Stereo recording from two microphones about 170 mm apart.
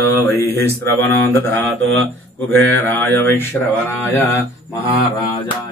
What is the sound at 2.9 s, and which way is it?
Speech, 10° left (ahead or behind).